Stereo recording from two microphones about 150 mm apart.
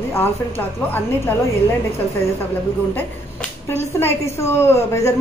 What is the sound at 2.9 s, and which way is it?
Finger snapping, 15° left (ahead or behind).